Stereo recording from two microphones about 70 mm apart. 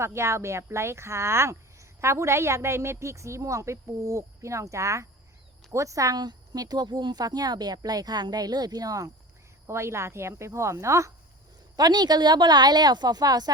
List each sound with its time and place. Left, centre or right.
0.0 s speech: right
6.1 s speech: right
9.6 s speech: right
11.8 s speech: right